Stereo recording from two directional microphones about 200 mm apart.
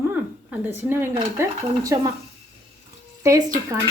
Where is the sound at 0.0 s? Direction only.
10° right (ahead or behind).